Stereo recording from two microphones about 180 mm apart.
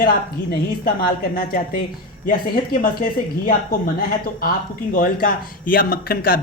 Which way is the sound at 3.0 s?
55° left (ahead or behind).